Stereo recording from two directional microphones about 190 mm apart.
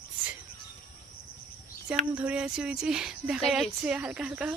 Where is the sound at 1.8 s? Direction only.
5° right (ahead or behind).